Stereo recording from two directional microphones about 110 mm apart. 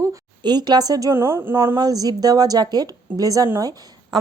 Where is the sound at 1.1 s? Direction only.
25° right (ahead or behind).